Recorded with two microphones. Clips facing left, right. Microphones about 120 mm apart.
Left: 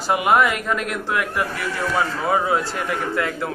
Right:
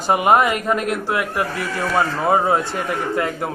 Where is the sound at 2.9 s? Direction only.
35° right (ahead or behind).